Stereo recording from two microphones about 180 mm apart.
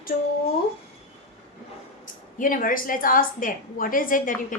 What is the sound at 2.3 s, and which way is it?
A woman's voice, 50° left (ahead or behind).